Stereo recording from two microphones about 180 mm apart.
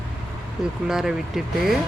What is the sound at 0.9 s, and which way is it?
Speech, 5° right (ahead or behind).